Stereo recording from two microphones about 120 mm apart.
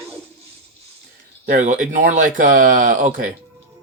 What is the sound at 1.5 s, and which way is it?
Speech, 90° right.